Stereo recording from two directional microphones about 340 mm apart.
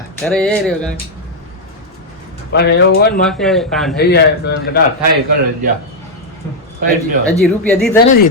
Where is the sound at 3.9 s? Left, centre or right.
Left.